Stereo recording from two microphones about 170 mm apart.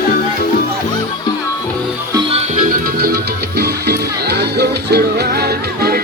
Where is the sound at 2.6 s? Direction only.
55° right (ahead or behind).